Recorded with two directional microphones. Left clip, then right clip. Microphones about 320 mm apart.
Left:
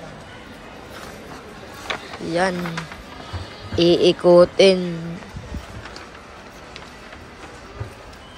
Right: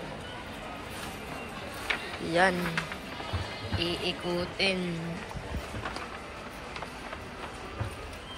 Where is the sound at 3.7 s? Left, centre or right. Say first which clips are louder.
Left 17 dB; centre.